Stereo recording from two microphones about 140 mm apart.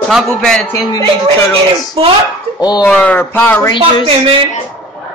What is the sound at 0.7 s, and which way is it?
Speech, 25° left (ahead or behind).